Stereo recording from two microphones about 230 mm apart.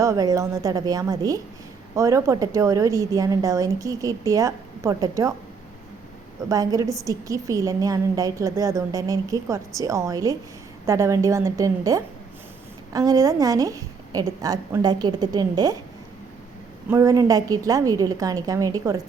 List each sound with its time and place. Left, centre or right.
0.0 s a woman's voice: centre
6.5 s a woman's voice: centre
16.9 s a woman's voice: centre